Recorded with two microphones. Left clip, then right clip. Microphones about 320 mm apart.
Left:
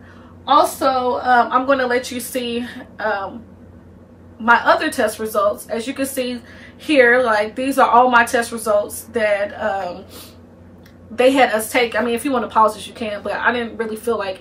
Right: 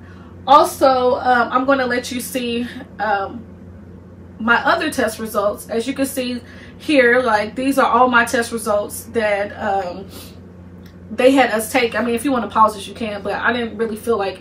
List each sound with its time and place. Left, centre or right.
0.5 s a woman's voice: centre
4.5 s a woman's voice: centre